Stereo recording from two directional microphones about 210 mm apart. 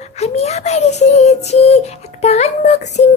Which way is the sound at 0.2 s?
30° left (ahead or behind).